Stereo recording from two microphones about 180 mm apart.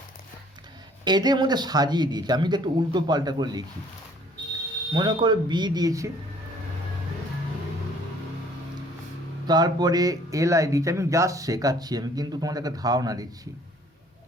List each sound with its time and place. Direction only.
1.0 s speech: 25° right (ahead or behind)
4.9 s speech: 25° right (ahead or behind)
9.5 s speech: 25° right (ahead or behind)